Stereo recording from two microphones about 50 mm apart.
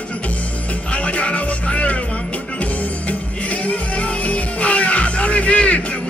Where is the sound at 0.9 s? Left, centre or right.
Left.